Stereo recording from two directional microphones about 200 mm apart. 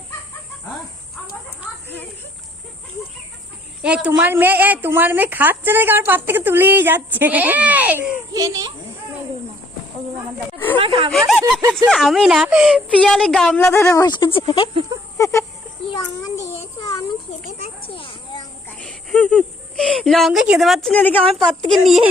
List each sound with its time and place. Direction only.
3.8 s a woman's voice: 5° right (ahead or behind)
10.8 s snake: 25° right (ahead or behind)
11.3 s a woman's voice: 5° right (ahead or behind); by 14.7 s 25° left (ahead or behind)
14.7 s a sound: 30° right (ahead or behind)
15.2 s a sound: 15° left (ahead or behind)
15.9 s child singing: 15° left (ahead or behind)
17.8 s children playing: 25° left (ahead or behind)
18.8 s a sound: 5° left (ahead or behind)
21.7 s a woman's voice: centre (ahead or behind)